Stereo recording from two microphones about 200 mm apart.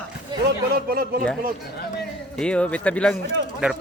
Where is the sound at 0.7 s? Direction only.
50° right (ahead or behind).